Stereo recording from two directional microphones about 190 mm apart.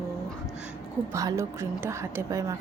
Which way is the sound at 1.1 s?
15° right (ahead or behind).